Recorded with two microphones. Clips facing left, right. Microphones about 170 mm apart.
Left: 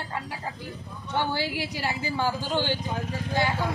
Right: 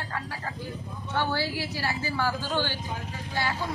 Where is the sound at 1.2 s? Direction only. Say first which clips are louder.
Left 1 dB; 15° left (ahead or behind).